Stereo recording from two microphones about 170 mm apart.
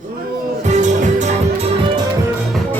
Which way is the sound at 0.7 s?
45° right (ahead or behind).